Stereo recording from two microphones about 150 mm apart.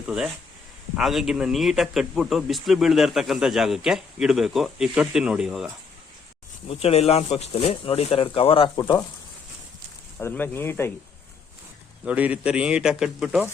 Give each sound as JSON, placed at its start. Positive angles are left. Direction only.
{"t": 0.9, "sound": "speech", "side_deg": 0}
{"t": 6.7, "sound": "speech", "side_deg": 40}
{"t": 10.2, "sound": "speech", "side_deg": 15}
{"t": 12.0, "sound": "speech", "side_deg": -10}